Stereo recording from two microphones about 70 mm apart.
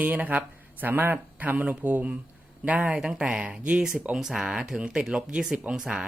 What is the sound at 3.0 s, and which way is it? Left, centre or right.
Speech, centre.